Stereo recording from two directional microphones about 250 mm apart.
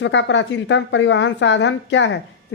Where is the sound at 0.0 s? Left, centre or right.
Left.